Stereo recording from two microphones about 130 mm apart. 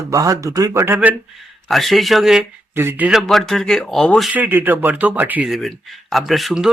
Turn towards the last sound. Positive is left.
turn(degrees=0)  # may be behind; listen again after turning